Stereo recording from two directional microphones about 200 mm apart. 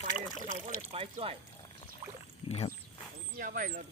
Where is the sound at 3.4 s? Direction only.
40° right (ahead or behind).